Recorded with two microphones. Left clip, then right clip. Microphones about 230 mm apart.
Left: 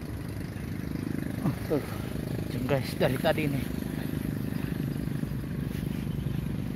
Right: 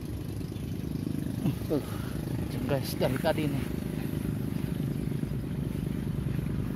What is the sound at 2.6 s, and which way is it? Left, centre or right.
Speech, centre.